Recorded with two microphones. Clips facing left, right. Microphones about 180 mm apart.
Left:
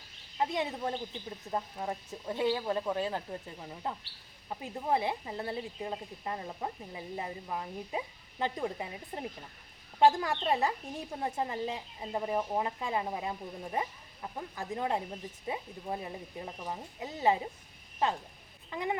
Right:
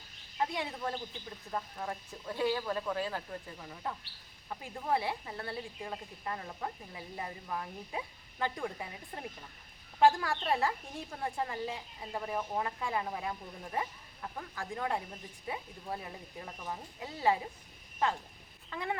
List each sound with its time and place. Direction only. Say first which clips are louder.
0.3 s speech: left 3 dB; 20° left (ahead or behind)
18.7 s speech: left 3 dB; 20° left (ahead or behind)